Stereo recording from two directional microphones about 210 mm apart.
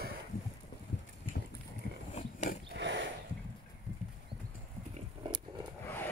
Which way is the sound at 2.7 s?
55° right (ahead or behind).